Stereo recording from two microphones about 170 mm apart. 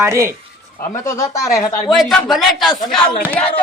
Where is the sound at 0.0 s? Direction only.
15° right (ahead or behind).